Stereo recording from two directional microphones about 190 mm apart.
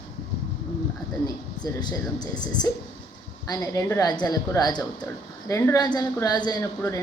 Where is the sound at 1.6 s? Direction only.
20° left (ahead or behind).